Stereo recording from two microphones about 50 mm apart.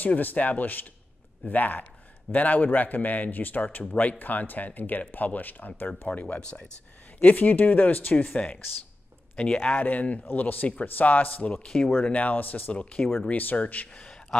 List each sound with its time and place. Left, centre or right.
0.0 s speech: left
5.9 s speech: left
12.0 s speech: left
12.7 s speech: left
13.3 s speech: left